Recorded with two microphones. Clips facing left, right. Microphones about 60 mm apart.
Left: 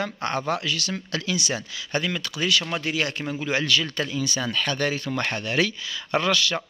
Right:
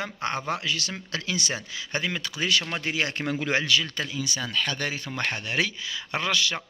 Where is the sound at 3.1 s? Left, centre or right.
Right.